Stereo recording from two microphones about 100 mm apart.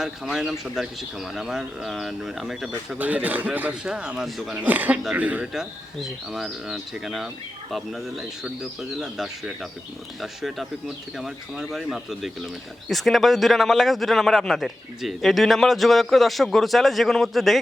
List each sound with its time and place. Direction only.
0.0 s a man's voice: 5° right (ahead or behind)
3.0 s a man's voice: 15° right (ahead or behind)
4.5 s a man's voice: 15° right (ahead or behind); by 17.6 s centre (ahead or behind)